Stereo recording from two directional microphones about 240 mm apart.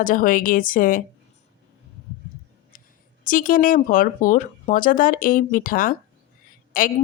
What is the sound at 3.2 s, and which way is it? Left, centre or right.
Speech, left.